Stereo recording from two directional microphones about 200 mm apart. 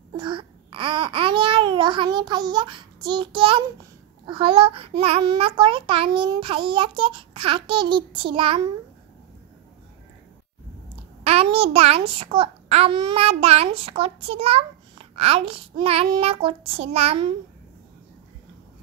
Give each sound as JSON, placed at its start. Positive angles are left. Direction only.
{"t": 0.1, "sound": "babbling", "side_deg": -25}
{"t": 4.3, "sound": "a child's voice", "side_deg": -25}
{"t": 11.2, "sound": "a child's voice", "side_deg": -30}